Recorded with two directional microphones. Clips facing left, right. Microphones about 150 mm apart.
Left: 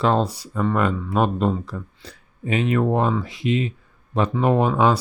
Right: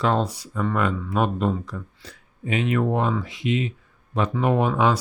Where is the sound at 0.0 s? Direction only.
30° left (ahead or behind).